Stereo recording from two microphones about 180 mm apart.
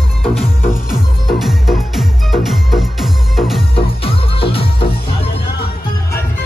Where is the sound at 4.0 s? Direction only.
30° left (ahead or behind).